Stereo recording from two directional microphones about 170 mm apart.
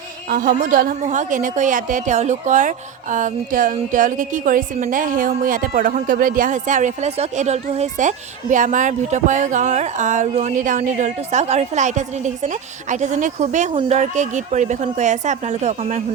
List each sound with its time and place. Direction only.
0.3 s a woman's voice: 55° right (ahead or behind)